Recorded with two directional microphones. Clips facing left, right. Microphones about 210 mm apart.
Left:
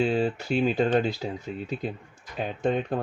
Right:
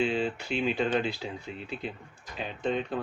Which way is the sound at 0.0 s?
40° left (ahead or behind).